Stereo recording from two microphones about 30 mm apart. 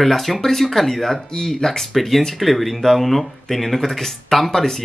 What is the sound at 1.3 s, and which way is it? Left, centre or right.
Speech, left.